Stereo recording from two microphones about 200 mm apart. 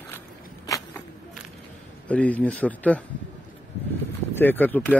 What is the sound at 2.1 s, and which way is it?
Speech, 5° left (ahead or behind).